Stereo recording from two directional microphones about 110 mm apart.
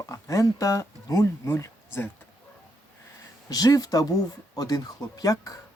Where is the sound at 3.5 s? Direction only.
35° left (ahead or behind).